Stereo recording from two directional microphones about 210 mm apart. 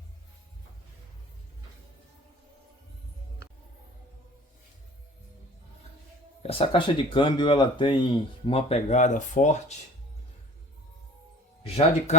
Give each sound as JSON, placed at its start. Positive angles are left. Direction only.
{"t": 6.4, "sound": "speech", "side_deg": 25}
{"t": 11.7, "sound": "speech", "side_deg": 30}